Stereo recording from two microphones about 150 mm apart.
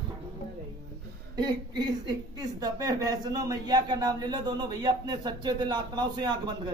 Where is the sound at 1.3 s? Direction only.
30° right (ahead or behind).